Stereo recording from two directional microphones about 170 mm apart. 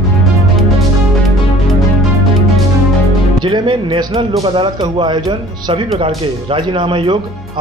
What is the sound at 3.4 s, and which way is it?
Speech, 30° right (ahead or behind).